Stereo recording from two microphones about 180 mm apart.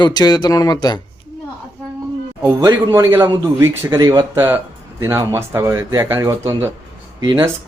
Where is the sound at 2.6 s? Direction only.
15° right (ahead or behind).